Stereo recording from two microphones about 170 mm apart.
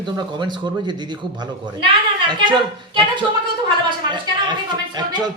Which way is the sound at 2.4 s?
30° right (ahead or behind).